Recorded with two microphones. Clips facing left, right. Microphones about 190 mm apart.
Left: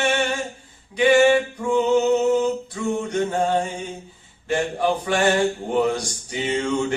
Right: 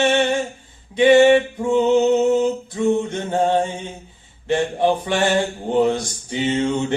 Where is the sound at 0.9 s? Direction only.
25° right (ahead or behind).